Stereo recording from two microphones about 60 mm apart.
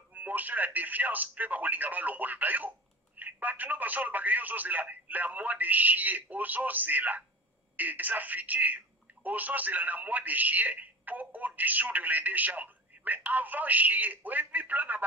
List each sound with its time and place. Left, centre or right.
0.1 s speech: right